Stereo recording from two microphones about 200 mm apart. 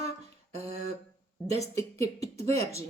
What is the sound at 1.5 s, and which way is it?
A woman's voice, 15° left (ahead or behind).